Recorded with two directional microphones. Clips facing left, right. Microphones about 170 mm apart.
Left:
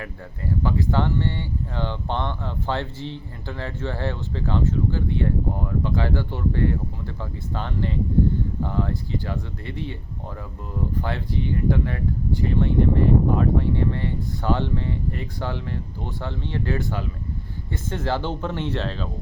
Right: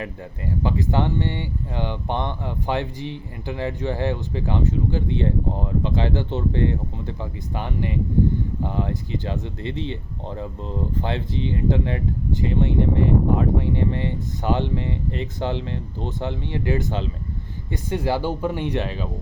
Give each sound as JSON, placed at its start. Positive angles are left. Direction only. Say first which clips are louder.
{"t": 0.0, "sound": "speech", "louder": "right 2 dB", "side_deg": -20}
{"t": 11.0, "sound": "speech", "louder": "right 2 dB", "side_deg": -20}